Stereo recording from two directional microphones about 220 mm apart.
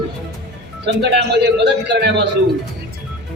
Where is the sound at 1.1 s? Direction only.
50° right (ahead or behind).